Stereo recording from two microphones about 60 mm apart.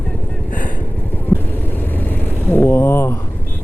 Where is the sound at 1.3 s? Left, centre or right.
Centre.